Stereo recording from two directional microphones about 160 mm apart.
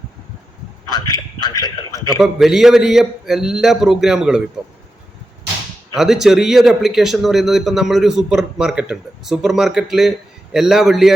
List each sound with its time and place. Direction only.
0.9 s a man's voice: 25° left (ahead or behind)
2.1 s speech: centre (ahead or behind)
5.9 s speech: 5° right (ahead or behind)